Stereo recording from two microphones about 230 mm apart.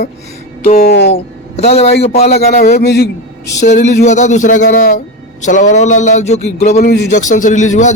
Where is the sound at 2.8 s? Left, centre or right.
Left.